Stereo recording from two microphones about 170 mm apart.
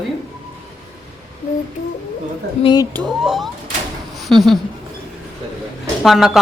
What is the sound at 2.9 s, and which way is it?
Speech, centre (ahead or behind).